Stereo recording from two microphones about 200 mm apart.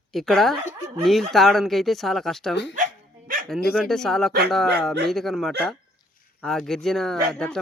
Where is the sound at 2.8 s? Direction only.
45° right (ahead or behind).